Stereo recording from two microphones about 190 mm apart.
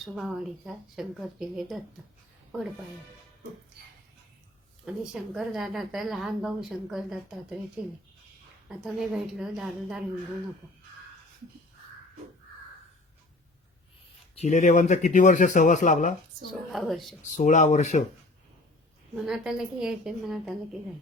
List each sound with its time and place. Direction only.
0.0 s a woman's voice: centre (ahead or behind)
4.9 s a woman's voice: 5° right (ahead or behind)
8.8 s a woman's voice: centre (ahead or behind)
14.3 s a man's voice: 35° left (ahead or behind)
16.7 s a woman's voice: centre (ahead or behind)
17.3 s a man's voice: 40° left (ahead or behind)
19.1 s a woman's voice: centre (ahead or behind)